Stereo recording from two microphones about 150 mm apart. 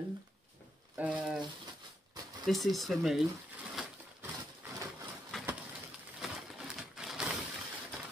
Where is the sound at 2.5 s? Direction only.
Centre (ahead or behind).